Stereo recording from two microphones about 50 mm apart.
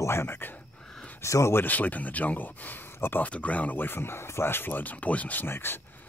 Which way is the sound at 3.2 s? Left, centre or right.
Left.